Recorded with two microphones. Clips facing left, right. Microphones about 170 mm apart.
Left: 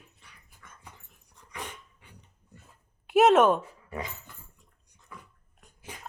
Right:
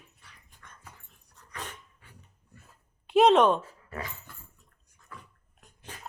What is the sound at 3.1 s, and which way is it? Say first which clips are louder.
Speech: even; 5° left (ahead or behind).